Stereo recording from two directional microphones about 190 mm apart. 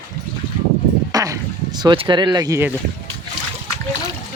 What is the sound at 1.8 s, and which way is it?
Speech, 25° right (ahead or behind).